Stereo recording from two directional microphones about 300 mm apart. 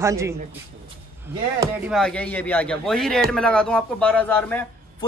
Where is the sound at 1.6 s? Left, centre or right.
Centre.